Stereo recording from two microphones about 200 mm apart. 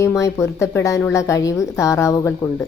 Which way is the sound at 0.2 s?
15° left (ahead or behind).